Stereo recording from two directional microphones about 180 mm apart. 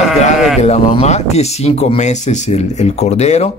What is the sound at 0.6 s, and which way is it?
Speech, 35° left (ahead or behind).